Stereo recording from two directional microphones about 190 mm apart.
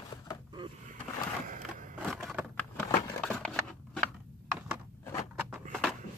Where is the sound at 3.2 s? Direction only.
5° left (ahead or behind).